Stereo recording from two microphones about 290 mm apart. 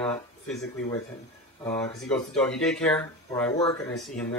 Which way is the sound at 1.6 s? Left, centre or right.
Centre.